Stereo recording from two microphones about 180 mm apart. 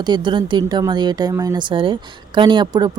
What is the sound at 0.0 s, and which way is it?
Speech, 25° right (ahead or behind).